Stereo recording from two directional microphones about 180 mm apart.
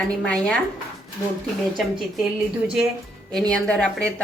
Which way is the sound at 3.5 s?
5° left (ahead or behind).